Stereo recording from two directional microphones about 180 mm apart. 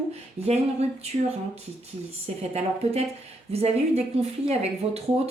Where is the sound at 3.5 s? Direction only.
35° right (ahead or behind).